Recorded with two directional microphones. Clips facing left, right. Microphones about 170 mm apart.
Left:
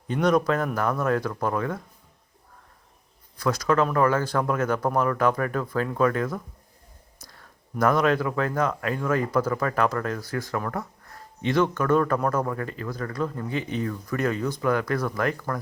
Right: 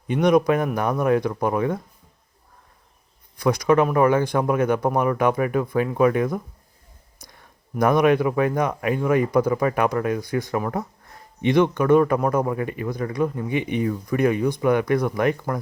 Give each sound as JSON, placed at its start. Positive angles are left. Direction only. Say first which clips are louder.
{"t": 0.1, "sound": "speech", "louder": "right 4 dB", "side_deg": -10}
{"t": 3.3, "sound": "speech", "louder": "right 4 dB", "side_deg": -15}